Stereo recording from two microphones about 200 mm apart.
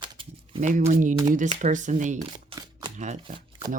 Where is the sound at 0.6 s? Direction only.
40° right (ahead or behind).